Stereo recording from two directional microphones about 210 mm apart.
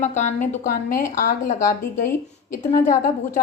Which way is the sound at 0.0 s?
35° left (ahead or behind).